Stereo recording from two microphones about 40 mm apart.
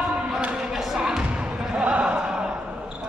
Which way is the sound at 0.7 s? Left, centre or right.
Centre.